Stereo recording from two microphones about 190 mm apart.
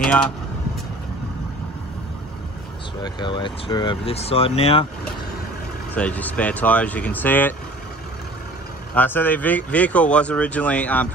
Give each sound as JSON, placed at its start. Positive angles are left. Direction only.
{"t": 0.0, "sound": "vehicle", "side_deg": 5}
{"t": 3.0, "sound": "speech", "side_deg": 25}
{"t": 5.9, "sound": "speech", "side_deg": 5}
{"t": 8.9, "sound": "speech", "side_deg": 10}